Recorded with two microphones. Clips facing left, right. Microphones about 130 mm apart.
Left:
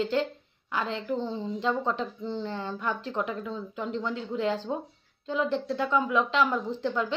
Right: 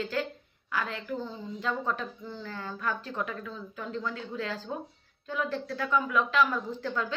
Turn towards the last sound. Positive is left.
turn(degrees=25)  # may be behind; listen again after turning